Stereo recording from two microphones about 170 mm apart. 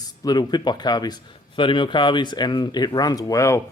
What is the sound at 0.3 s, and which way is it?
A man's voice, 25° left (ahead or behind).